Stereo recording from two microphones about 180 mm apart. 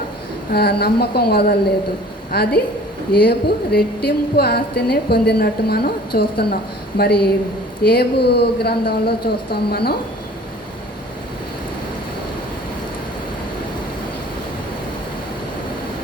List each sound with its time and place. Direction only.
0.5 s speech: 60° left (ahead or behind)